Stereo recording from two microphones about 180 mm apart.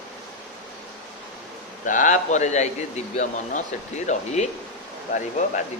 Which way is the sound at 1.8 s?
45° left (ahead or behind).